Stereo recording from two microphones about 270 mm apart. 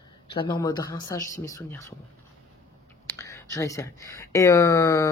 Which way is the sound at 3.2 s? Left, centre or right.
Centre.